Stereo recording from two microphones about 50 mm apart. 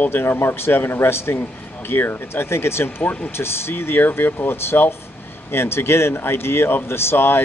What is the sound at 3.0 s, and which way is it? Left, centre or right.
Speech, left.